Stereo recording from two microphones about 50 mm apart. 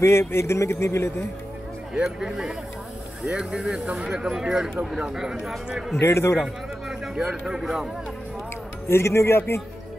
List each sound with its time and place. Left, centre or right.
0.0 s speech: left
2.0 s speech: centre
3.8 s speech: right
4.1 s speech: centre
5.9 s speech: left
6.9 s speech: centre
8.8 s speech: left